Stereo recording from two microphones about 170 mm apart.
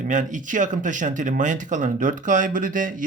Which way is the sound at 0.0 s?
50° right (ahead or behind).